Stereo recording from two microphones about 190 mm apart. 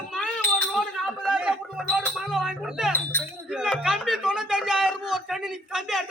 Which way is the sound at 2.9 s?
10° left (ahead or behind).